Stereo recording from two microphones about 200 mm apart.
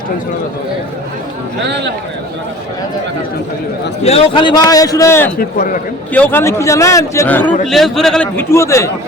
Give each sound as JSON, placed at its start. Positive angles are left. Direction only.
{"t": 1.6, "sound": "speech", "side_deg": -60}
{"t": 4.0, "sound": "a man's voice", "side_deg": 30}
{"t": 5.4, "sound": "a man's voice", "side_deg": 45}
{"t": 6.1, "sound": "a man's voice", "side_deg": 10}